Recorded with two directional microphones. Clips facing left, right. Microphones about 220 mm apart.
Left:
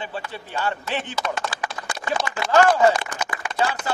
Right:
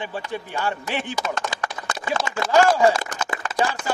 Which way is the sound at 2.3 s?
25° right (ahead or behind).